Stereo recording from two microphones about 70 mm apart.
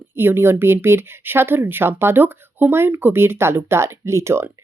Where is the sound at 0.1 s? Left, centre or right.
Right.